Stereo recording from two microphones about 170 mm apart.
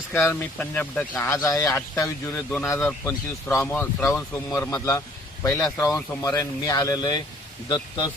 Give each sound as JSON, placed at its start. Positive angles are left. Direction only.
{"t": 0.1, "sound": "speech", "side_deg": 15}